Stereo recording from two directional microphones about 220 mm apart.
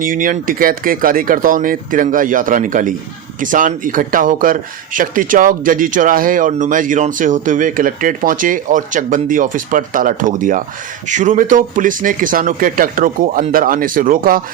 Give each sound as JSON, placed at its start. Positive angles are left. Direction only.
{"t": 0.0, "sound": "speech", "side_deg": -40}